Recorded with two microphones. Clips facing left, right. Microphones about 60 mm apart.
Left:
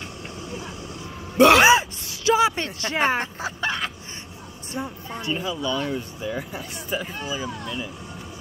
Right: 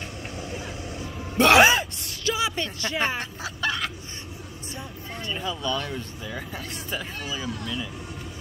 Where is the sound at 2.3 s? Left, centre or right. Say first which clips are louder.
Left 8 dB; left.